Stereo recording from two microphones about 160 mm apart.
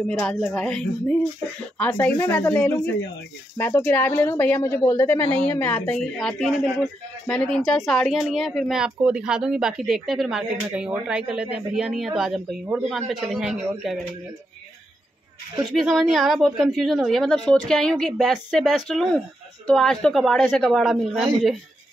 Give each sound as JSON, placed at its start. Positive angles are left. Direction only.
{"t": 0.2, "sound": "a woman's voice", "side_deg": 5}
{"t": 15.6, "sound": "a woman's voice", "side_deg": 0}